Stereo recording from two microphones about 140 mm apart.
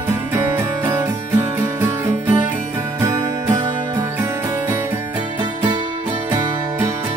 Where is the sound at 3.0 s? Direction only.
20° right (ahead or behind).